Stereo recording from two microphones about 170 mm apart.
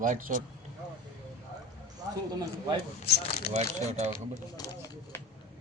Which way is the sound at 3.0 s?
70° left (ahead or behind).